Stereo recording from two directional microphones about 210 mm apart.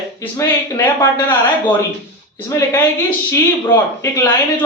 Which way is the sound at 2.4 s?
15° left (ahead or behind).